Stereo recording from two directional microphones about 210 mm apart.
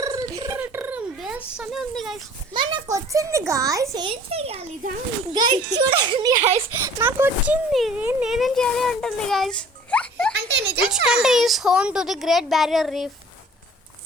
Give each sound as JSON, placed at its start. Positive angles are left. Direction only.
{"t": 0.0, "sound": "a sound", "side_deg": -15}
{"t": 1.5, "sound": "speech", "side_deg": 0}
{"t": 2.5, "sound": "a child's voice", "side_deg": -20}